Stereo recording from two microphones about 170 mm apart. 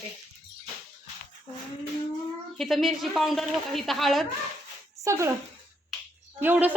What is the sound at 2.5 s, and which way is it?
Speech, centre (ahead or behind).